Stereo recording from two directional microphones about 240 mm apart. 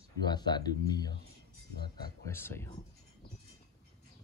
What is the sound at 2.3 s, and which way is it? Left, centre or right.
Speech, centre.